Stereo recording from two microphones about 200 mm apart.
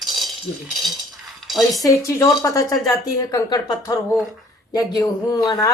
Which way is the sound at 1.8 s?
15° left (ahead or behind).